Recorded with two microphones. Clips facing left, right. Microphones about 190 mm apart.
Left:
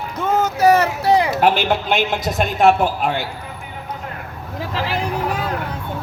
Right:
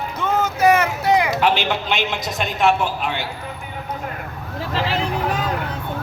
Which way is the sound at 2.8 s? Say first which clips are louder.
Left 4 dB; 40° left (ahead or behind).